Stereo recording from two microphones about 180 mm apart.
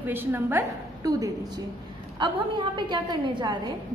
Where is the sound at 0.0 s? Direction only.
10° right (ahead or behind).